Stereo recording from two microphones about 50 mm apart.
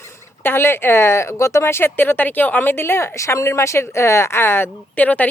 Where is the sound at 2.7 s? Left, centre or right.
Left.